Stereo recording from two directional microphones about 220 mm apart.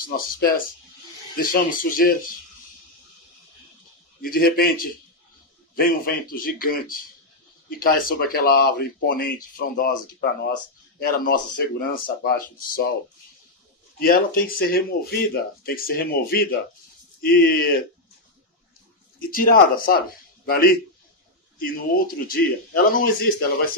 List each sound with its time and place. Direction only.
0.0 s speech: 40° left (ahead or behind)
4.2 s speech: 40° left (ahead or behind)
11.0 s speech: 40° left (ahead or behind)
13.9 s speech: 40° left (ahead or behind)
19.1 s a man's voice: 40° left (ahead or behind)